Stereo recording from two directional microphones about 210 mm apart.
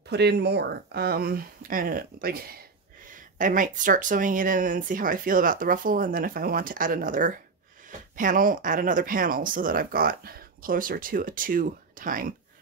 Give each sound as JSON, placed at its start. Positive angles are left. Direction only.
{"t": 0.1, "sound": "speech", "side_deg": -50}